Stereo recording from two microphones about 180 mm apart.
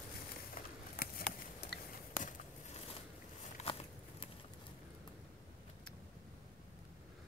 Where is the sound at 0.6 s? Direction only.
55° left (ahead or behind).